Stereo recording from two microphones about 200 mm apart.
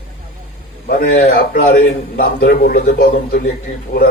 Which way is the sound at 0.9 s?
45° left (ahead or behind).